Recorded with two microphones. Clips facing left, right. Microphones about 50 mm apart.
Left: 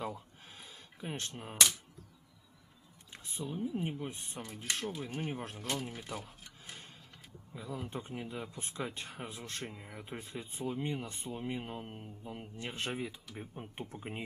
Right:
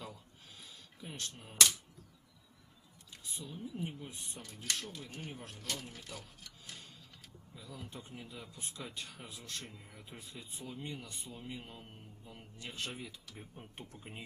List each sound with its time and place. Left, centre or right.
0.0 s a sound: left
3.1 s speech: left
4.4 s speech: left